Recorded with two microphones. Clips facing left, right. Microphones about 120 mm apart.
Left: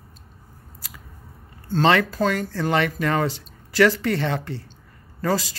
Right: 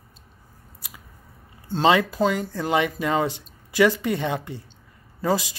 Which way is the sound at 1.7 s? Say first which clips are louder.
Even; 15° right (ahead or behind).